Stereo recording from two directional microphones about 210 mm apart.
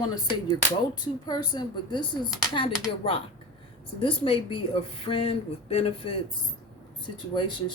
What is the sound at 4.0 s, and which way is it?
Speech, 25° left (ahead or behind).